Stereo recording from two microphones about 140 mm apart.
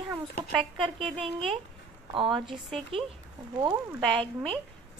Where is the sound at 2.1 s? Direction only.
35° right (ahead or behind).